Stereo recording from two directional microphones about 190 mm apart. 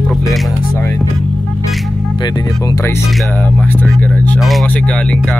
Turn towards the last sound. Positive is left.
turn(degrees=5)  # may be behind; listen again after turning